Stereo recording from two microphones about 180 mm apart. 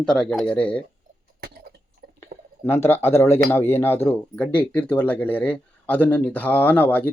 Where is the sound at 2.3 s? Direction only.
65° right (ahead or behind).